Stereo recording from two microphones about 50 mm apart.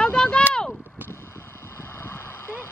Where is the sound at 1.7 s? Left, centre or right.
Left.